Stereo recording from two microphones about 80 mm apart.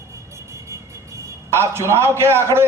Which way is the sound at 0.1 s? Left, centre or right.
Right.